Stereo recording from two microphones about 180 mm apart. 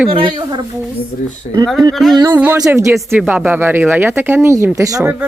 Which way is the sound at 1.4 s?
45° left (ahead or behind).